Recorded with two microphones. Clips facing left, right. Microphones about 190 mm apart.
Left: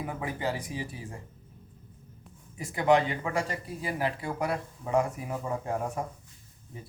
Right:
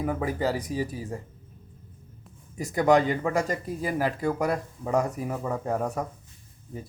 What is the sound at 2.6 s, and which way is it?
Speech, 40° right (ahead or behind).